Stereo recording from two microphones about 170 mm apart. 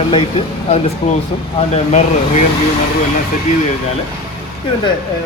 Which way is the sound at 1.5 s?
40° left (ahead or behind).